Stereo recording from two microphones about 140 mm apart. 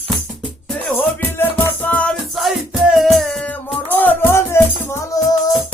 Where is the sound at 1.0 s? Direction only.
15° left (ahead or behind).